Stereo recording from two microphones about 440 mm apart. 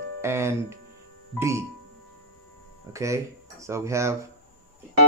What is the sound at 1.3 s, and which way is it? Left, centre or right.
Speech, centre.